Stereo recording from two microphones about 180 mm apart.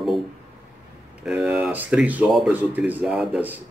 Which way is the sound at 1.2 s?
5° right (ahead or behind).